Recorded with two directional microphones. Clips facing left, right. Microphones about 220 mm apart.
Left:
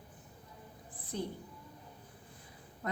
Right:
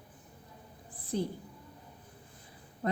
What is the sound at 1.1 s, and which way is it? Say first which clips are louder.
Speech: right 5 dB; 35° right (ahead or behind).